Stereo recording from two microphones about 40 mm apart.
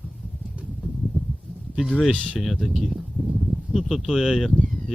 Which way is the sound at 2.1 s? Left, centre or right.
Left.